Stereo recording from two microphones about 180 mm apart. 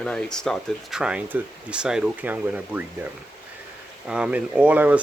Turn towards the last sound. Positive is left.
turn(degrees=-10)  # may be behind; listen again after turning